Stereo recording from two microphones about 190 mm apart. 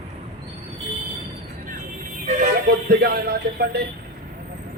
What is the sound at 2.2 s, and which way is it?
Speech, 45° right (ahead or behind).